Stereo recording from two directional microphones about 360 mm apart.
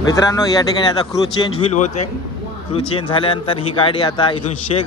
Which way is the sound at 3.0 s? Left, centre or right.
Centre.